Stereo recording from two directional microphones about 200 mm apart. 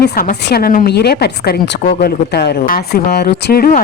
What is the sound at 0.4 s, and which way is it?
A woman's voice, 50° left (ahead or behind).